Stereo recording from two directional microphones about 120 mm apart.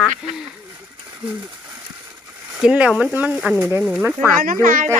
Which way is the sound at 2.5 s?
10° right (ahead or behind).